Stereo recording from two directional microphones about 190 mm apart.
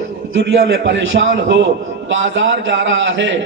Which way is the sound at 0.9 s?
70° right (ahead or behind).